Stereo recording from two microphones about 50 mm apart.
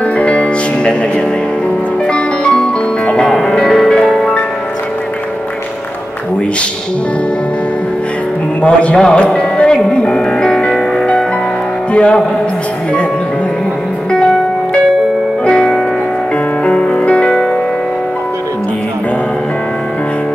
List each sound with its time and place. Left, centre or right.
0.0 s music: left
8.6 s speech: left
9.0 s music: centre
15.4 s music: centre